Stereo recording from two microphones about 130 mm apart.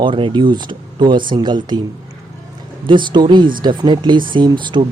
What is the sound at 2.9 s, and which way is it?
Speech, 35° right (ahead or behind).